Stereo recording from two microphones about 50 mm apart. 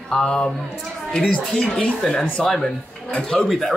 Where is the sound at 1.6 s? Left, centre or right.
Left.